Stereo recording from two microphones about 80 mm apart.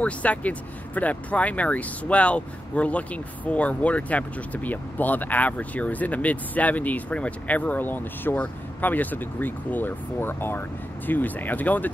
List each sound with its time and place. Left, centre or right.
0.0 s speech: centre